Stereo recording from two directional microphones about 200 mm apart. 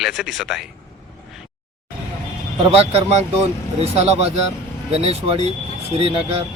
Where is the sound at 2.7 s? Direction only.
30° right (ahead or behind).